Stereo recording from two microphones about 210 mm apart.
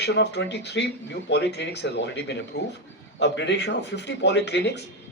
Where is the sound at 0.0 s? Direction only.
55° left (ahead or behind).